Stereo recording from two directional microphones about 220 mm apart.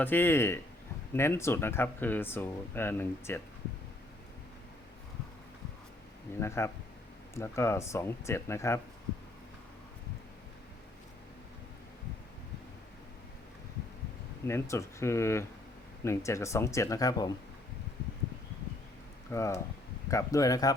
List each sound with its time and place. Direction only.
0.0 s speech: 10° left (ahead or behind)
6.4 s speech: 10° left (ahead or behind)
14.4 s speech: 10° left (ahead or behind)
19.3 s speech: 15° left (ahead or behind)